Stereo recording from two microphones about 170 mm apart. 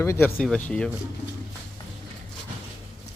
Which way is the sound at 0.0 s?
15° left (ahead or behind).